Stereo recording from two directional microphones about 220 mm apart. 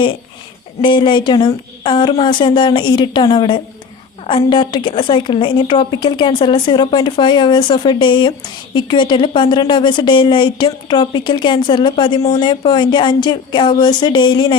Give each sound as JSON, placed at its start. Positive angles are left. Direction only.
{"t": 0.8, "sound": "a woman's voice", "side_deg": 20}